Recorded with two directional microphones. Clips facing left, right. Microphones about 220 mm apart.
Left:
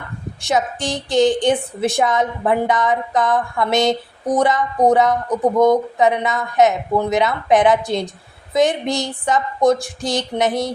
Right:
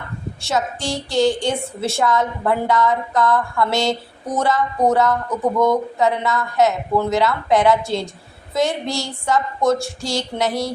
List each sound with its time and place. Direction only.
0.4 s a woman's voice: 15° left (ahead or behind)